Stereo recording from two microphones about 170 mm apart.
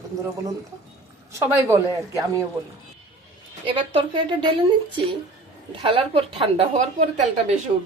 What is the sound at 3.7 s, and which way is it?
Speech, 30° right (ahead or behind).